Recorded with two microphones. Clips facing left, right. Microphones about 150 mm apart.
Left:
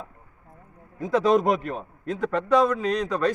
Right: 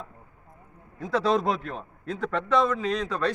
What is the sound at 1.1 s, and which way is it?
A man's voice, 15° left (ahead or behind).